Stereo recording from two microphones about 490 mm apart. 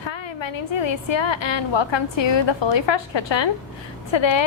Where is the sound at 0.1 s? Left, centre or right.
Left.